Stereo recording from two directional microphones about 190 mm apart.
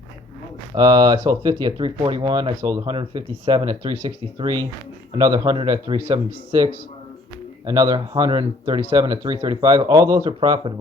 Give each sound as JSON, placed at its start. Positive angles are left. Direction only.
{"t": 0.8, "sound": "speech", "side_deg": -20}